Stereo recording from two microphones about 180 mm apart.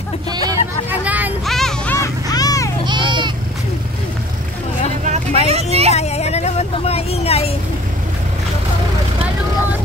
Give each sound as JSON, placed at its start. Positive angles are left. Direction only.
{"t": 0.3, "sound": "speech", "side_deg": -20}
{"t": 0.8, "sound": "vehicle", "side_deg": -10}
{"t": 1.5, "sound": "music", "side_deg": 5}
{"t": 2.0, "sound": "a sound", "side_deg": 20}
{"t": 2.8, "sound": "goat", "side_deg": -25}
{"t": 5.0, "sound": "vehicle", "side_deg": -40}
{"t": 5.5, "sound": "speech", "side_deg": -35}
{"t": 5.9, "sound": "vehicle", "side_deg": 35}